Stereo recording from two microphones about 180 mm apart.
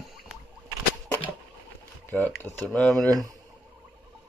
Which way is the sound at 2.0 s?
10° left (ahead or behind).